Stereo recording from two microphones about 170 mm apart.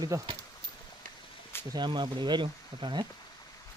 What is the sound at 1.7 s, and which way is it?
Speech, 25° right (ahead or behind).